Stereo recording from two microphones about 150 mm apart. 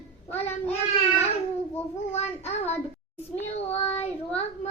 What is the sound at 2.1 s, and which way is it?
Child singing, 45° left (ahead or behind).